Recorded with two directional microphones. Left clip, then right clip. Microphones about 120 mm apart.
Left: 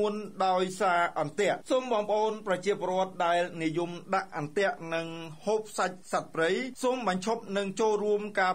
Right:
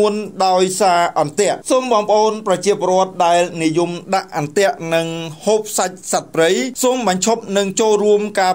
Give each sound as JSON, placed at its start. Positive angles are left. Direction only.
{"t": 0.0, "sound": "speech", "side_deg": -20}
{"t": 0.4, "sound": "speech", "side_deg": -30}
{"t": 4.1, "sound": "speech", "side_deg": -40}